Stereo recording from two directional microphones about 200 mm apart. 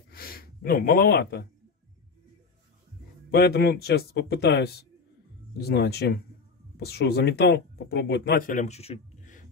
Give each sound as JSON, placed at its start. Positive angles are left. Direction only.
{"t": 0.1, "sound": "gasp", "side_deg": 45}
{"t": 3.3, "sound": "speech", "side_deg": 55}